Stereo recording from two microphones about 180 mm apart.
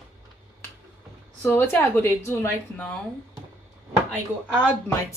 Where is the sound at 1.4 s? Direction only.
10° left (ahead or behind).